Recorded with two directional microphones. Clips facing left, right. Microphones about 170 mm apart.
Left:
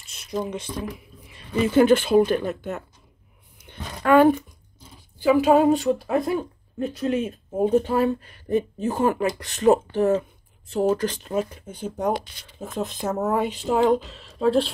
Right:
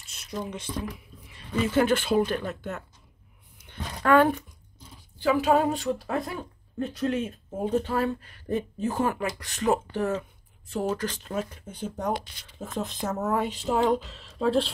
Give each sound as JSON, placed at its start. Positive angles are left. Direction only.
{"t": 0.1, "sound": "speech", "side_deg": 15}
{"t": 4.0, "sound": "a sound", "side_deg": 10}
{"t": 5.2, "sound": "a woman's voice", "side_deg": 10}